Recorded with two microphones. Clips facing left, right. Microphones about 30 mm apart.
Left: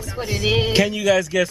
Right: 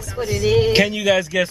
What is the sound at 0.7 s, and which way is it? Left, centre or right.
Speech, centre.